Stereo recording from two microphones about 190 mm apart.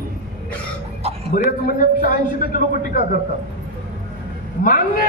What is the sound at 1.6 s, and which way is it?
A man's voice, 45° left (ahead or behind).